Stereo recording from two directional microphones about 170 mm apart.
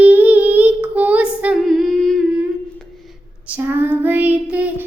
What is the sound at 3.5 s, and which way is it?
Child singing, 10° right (ahead or behind).